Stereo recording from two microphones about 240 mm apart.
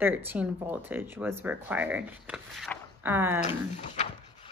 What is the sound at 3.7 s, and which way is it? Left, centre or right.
Dog, left.